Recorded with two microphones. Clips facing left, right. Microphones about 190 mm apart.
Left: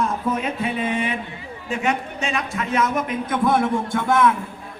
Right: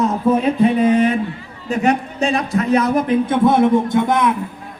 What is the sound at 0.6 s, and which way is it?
A man's voice, 40° right (ahead or behind).